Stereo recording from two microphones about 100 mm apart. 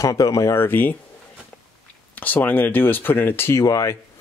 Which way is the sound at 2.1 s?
20° left (ahead or behind).